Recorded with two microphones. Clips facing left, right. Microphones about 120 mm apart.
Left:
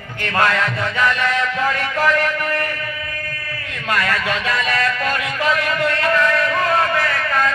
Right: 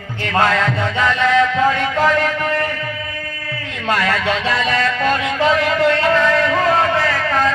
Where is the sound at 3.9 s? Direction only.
30° right (ahead or behind).